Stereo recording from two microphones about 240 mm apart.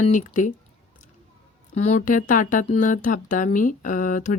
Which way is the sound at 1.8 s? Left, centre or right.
Left.